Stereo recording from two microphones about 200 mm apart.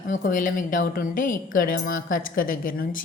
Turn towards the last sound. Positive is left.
turn(degrees=45)  # may be behind; listen again after turning